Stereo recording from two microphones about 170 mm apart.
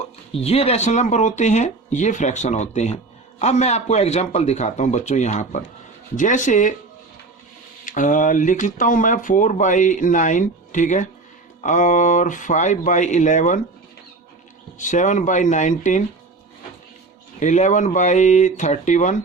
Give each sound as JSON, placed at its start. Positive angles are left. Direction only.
{"t": 0.3, "sound": "speech", "side_deg": 35}
{"t": 7.9, "sound": "speech", "side_deg": 50}
{"t": 14.8, "sound": "speech", "side_deg": 45}
{"t": 17.4, "sound": "speech", "side_deg": 45}